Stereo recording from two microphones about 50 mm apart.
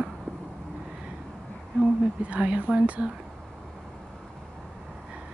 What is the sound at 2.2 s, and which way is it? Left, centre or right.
Speech, right.